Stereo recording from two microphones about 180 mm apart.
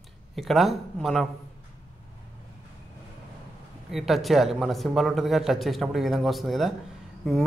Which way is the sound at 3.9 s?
Centre (ahead or behind).